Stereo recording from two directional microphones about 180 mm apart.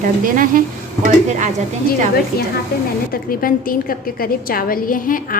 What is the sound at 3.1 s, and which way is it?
A woman's voice, 50° left (ahead or behind).